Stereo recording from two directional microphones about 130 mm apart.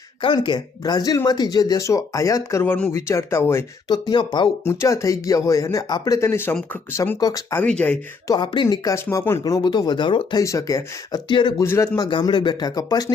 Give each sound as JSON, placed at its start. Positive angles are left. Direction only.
{"t": 0.2, "sound": "speech", "side_deg": 35}
{"t": 3.8, "sound": "speech", "side_deg": 35}
{"t": 4.6, "sound": "speech", "side_deg": 20}
{"t": 7.5, "sound": "speech", "side_deg": 10}
{"t": 8.3, "sound": "speech", "side_deg": 30}
{"t": 10.4, "sound": "speech", "side_deg": 25}
{"t": 11.3, "sound": "speech", "side_deg": 35}
{"t": 11.6, "sound": "speech", "side_deg": 20}
{"t": 12.2, "sound": "speech", "side_deg": 35}